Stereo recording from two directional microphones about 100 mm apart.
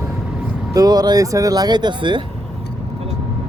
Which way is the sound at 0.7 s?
40° right (ahead or behind).